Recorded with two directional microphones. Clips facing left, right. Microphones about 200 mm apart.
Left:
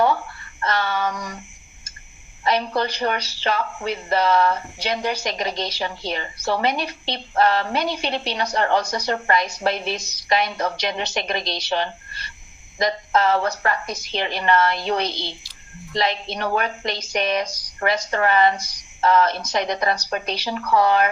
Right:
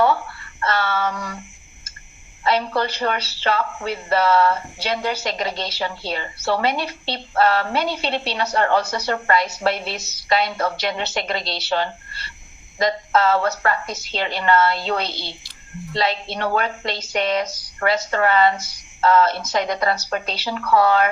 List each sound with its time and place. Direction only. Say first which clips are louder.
0.6 s speech: right 1 dB; 15° left (ahead or behind)
2.4 s speech: right 1 dB; 15° left (ahead or behind)